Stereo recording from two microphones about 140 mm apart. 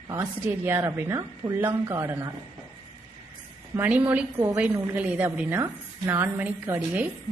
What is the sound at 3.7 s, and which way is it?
A woman's voice, 10° right (ahead or behind).